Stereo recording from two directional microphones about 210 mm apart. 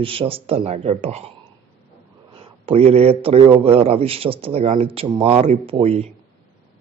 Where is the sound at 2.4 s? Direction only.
25° right (ahead or behind).